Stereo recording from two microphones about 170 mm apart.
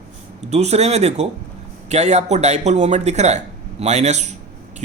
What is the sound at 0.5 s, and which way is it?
Speech, 40° right (ahead or behind).